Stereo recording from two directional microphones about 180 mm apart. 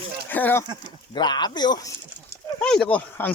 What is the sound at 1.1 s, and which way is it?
Speech, 25° left (ahead or behind).